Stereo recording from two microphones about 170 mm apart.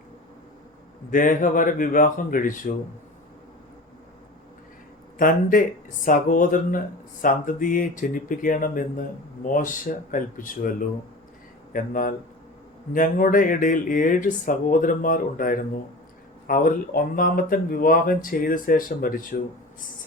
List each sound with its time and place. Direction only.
1.1 s speech: 50° left (ahead or behind)
5.1 s speech: 55° left (ahead or behind)